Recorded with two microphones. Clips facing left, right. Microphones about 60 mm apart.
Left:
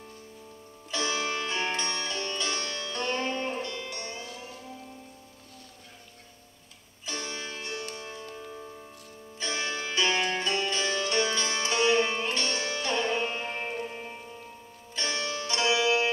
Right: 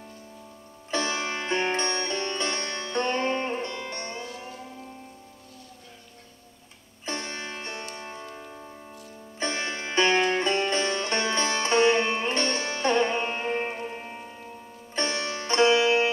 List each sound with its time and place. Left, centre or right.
0.9 s music: right
1.9 s sitar: right
7.1 s music: right
15.0 s music: right